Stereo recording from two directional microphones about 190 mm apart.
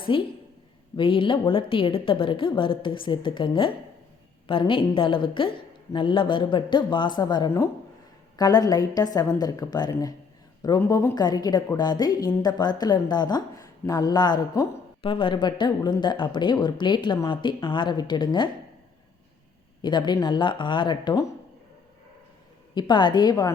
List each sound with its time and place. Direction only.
0.1 s a woman's voice: 25° left (ahead or behind)
19.8 s a woman's voice: 25° left (ahead or behind)
22.7 s a woman's voice: 25° left (ahead or behind)